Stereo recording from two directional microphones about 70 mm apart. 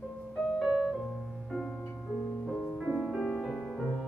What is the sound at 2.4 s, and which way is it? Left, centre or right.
Music, centre.